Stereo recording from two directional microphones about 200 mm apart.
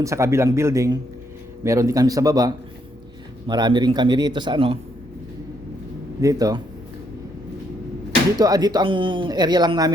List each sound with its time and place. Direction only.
0.0 s speech: 15° right (ahead or behind)
6.2 s speech: 20° right (ahead or behind)
8.4 s speech: 20° right (ahead or behind)